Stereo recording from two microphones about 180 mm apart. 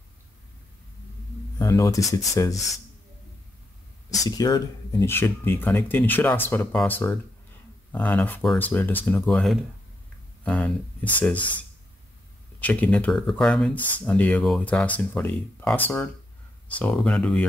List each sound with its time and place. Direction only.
1.6 s speech: 20° left (ahead or behind)
4.2 s speech: 20° left (ahead or behind)
12.5 s speech: 5° left (ahead or behind)